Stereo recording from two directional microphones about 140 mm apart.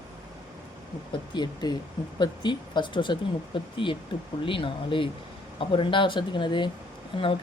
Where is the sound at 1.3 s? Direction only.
30° left (ahead or behind).